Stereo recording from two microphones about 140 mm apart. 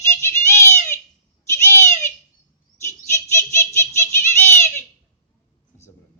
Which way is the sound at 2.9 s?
20° left (ahead or behind).